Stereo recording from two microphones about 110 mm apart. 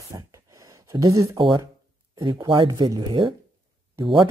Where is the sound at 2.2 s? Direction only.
45° right (ahead or behind).